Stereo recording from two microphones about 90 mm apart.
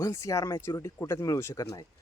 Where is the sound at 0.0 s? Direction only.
35° left (ahead or behind).